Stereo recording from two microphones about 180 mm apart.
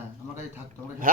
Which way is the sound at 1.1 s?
50° right (ahead or behind).